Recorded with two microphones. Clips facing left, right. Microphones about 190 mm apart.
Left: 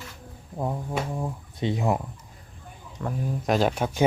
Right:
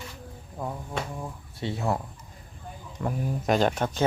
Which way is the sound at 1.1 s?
20° left (ahead or behind).